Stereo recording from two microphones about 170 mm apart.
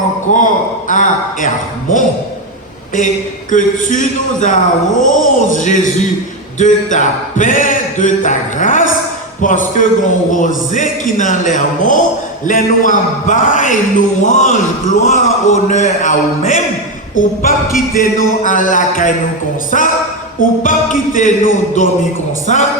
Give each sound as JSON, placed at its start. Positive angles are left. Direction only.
{"t": 0.3, "sound": "a man's voice", "side_deg": 50}
{"t": 3.5, "sound": "a man's voice", "side_deg": 50}